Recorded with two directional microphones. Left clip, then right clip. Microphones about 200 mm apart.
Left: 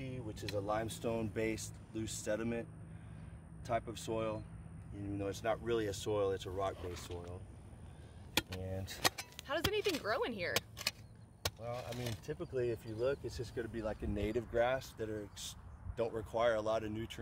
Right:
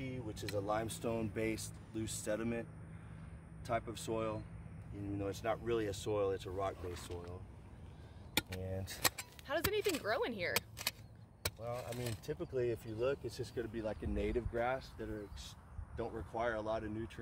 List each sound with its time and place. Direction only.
0.0 s speech: 10° right (ahead or behind); by 7.1 s 10° left (ahead or behind)
8.4 s speech: 5° right (ahead or behind)
10.5 s vehicle: 10° right (ahead or behind)
11.4 s speech: 10° right (ahead or behind)
13.7 s speech: 20° left (ahead or behind)
14.1 s speech: 40° left (ahead or behind); by 17.2 s 55° left (ahead or behind)